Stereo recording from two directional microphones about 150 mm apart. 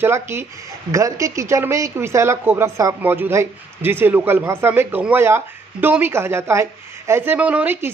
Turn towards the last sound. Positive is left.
turn(degrees=-15)  # may be behind; listen again after turning